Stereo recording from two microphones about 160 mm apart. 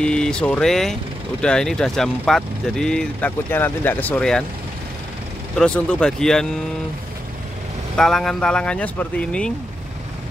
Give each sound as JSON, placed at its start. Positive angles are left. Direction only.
{"t": 0.0, "sound": "speech", "side_deg": 5}
{"t": 5.6, "sound": "speech", "side_deg": 5}
{"t": 7.9, "sound": "speech", "side_deg": 5}